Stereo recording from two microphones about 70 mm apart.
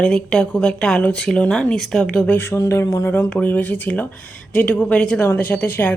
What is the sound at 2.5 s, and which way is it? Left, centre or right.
Speech, left.